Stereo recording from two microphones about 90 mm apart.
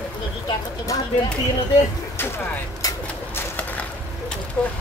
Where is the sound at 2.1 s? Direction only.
25° left (ahead or behind).